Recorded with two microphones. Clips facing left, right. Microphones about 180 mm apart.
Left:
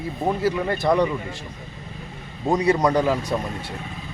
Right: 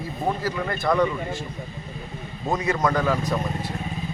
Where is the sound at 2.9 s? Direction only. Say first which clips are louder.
Left 2 dB; 25° left (ahead or behind).